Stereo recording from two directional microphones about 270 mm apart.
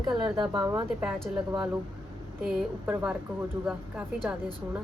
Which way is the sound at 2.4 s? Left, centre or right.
Centre.